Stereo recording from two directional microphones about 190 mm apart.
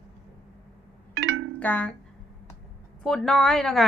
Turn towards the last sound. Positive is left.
turn(degrees=0)  # may be behind; listen again after turning